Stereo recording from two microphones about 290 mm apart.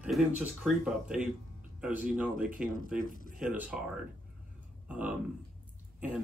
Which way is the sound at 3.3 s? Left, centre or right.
Centre.